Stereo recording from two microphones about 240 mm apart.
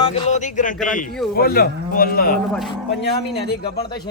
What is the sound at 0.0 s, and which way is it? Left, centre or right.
Speech, left.